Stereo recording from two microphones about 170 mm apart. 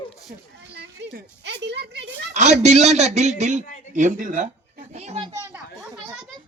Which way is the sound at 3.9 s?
45° right (ahead or behind).